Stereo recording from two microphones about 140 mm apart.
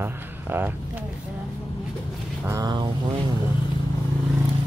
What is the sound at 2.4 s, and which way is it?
Speech, 25° right (ahead or behind).